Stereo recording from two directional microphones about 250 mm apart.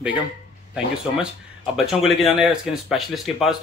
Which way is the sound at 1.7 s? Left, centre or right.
Centre.